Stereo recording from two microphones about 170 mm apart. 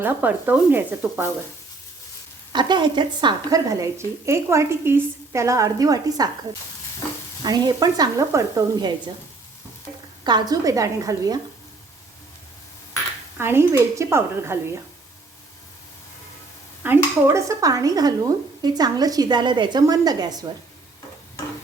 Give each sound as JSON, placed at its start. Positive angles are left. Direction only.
{"t": 0.0, "sound": "speech", "side_deg": -10}
{"t": 2.5, "sound": "speech", "side_deg": -25}
{"t": 7.4, "sound": "speech", "side_deg": -25}
{"t": 10.2, "sound": "speech", "side_deg": -25}
{"t": 13.3, "sound": "speech", "side_deg": -15}
{"t": 16.8, "sound": "speech", "side_deg": -15}